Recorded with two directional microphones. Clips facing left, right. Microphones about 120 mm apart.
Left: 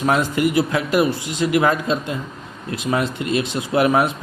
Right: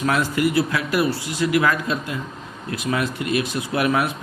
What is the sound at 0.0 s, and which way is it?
Speech, 25° left (ahead or behind).